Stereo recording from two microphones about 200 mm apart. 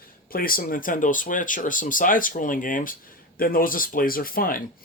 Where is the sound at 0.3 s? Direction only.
45° left (ahead or behind).